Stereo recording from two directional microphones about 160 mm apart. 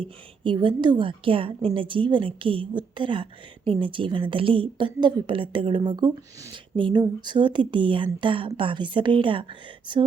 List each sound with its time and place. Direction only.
0.4 s a woman's voice: 30° right (ahead or behind)